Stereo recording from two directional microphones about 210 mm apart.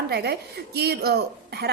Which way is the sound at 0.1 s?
50° right (ahead or behind).